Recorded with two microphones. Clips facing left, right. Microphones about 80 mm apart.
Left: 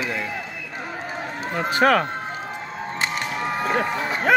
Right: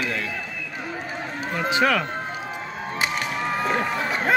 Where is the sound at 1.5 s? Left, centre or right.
Left.